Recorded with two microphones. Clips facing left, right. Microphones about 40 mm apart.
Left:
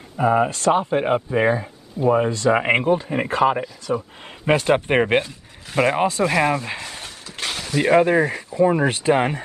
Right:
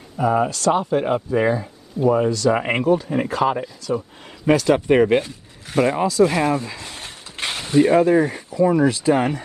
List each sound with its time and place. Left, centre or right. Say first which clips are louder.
0.2 s speech: left 1 dB; left
4.5 s speech: right 2 dB; left
7.0 s mechanisms: right 1 dB; right
7.7 s speech: right 2 dB; left